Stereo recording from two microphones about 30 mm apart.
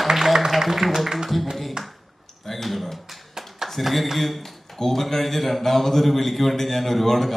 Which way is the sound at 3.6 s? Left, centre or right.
Centre.